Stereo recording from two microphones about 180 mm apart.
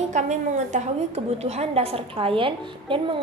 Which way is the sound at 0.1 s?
40° right (ahead or behind).